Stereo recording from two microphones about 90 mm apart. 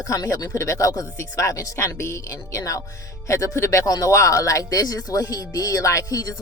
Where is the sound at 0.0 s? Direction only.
35° left (ahead or behind).